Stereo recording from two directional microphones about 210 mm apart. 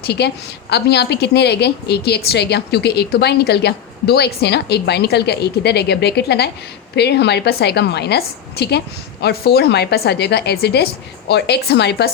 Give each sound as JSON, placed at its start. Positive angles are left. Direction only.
{"t": 0.0, "sound": "a woman's voice", "side_deg": 50}